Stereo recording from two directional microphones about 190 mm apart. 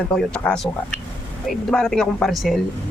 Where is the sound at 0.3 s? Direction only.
5° left (ahead or behind).